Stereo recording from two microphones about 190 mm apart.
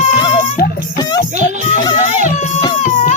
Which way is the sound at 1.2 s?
45° left (ahead or behind).